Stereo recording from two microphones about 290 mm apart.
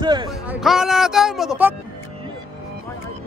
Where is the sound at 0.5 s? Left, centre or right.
Centre.